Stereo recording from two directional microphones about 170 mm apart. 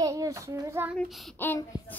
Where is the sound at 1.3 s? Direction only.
10° left (ahead or behind).